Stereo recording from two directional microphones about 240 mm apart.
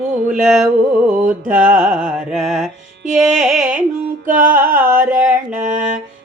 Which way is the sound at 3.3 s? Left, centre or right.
Centre.